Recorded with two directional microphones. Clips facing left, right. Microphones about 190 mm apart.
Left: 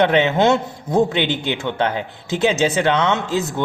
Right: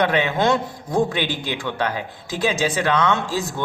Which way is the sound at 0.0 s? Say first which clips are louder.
Left 4 dB; 25° left (ahead or behind).